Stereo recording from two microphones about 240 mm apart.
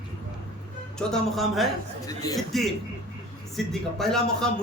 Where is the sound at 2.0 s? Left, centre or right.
Centre.